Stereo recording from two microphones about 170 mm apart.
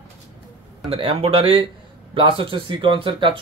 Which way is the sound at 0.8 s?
35° right (ahead or behind).